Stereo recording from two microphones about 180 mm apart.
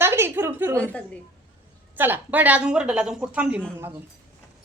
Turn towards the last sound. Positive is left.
turn(degrees=-5)  # may be behind; listen again after turning